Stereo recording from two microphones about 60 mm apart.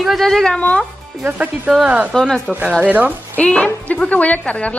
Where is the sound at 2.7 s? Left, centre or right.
Right.